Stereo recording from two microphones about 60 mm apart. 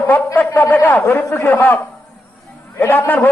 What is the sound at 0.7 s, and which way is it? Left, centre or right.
A man's voice, left.